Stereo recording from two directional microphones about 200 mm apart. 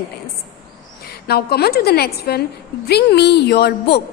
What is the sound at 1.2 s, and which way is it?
A woman's voice, 50° left (ahead or behind).